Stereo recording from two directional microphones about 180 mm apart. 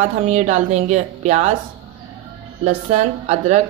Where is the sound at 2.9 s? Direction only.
40° right (ahead or behind).